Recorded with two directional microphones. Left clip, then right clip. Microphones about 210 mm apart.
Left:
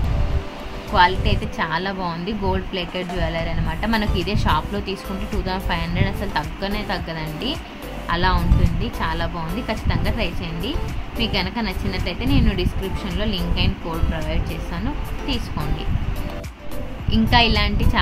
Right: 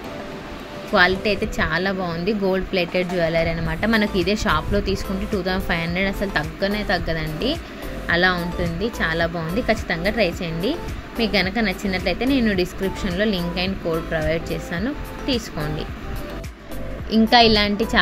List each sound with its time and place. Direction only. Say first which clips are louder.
0.9 s speech: even; 15° right (ahead or behind)
17.1 s speech: right 3 dB; 15° right (ahead or behind)